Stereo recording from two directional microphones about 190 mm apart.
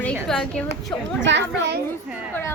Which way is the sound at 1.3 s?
65° right (ahead or behind).